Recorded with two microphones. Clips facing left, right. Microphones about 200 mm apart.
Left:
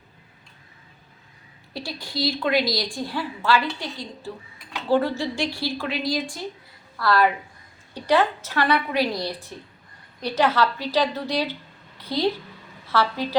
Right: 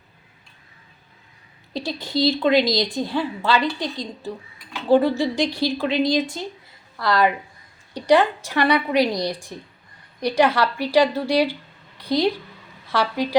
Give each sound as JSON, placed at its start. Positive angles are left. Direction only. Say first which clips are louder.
{"t": 1.7, "sound": "a woman's voice", "louder": "right 7 dB", "side_deg": -20}